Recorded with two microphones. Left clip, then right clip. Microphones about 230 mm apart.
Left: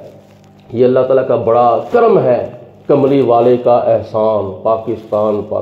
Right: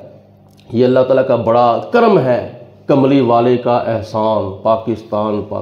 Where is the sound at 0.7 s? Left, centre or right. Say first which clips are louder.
Left 1 dB; right.